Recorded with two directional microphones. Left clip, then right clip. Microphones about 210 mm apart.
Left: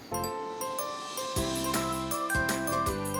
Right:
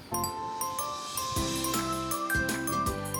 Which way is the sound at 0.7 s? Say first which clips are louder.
Right 1 dB; centre (ahead or behind).